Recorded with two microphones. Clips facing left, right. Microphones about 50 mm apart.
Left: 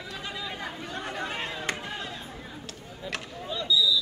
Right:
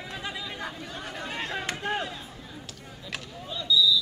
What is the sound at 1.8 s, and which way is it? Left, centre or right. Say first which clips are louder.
Chop: right 6 dB; right.